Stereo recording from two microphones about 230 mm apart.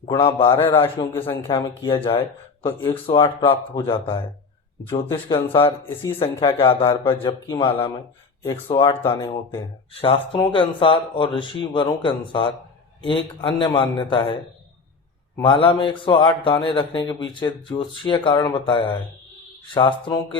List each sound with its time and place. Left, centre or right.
0.1 s a man's voice: left
0.6 s a man's voice: centre
5.8 s a man's voice: centre
15.4 s a man's voice: left